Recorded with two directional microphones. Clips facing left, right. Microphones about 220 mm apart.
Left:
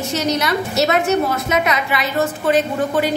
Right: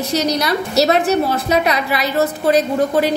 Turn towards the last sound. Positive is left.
turn(degrees=-35)  # may be behind; listen again after turning